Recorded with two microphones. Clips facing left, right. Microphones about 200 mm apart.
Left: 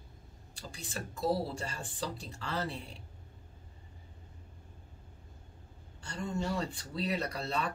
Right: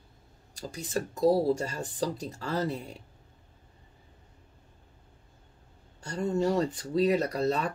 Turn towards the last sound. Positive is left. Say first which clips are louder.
# right 7 dB
turn(degrees=-40)  # may be behind; listen again after turning